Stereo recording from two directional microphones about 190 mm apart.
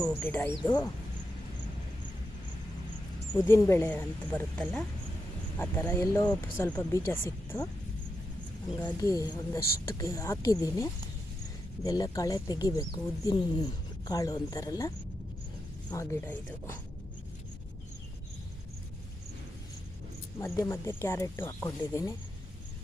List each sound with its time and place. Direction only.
0.0 s speech: 10° left (ahead or behind)
3.4 s speech: 15° left (ahead or behind)
8.9 s speech: 15° left (ahead or behind)
20.4 s speech: 15° left (ahead or behind)